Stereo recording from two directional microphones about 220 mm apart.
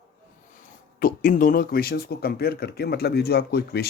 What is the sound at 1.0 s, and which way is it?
Speech, 40° left (ahead or behind).